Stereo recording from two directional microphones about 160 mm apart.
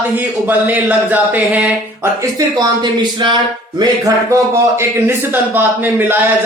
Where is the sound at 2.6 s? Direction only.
25° right (ahead or behind).